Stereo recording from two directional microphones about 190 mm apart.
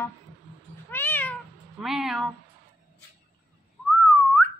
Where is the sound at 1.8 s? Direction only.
Centre (ahead or behind).